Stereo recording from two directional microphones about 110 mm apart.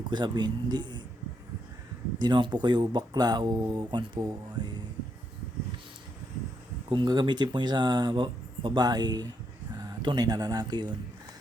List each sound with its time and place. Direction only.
0.1 s speech: 40° right (ahead or behind)
2.1 s speech: 40° right (ahead or behind)
6.9 s speech: 45° right (ahead or behind)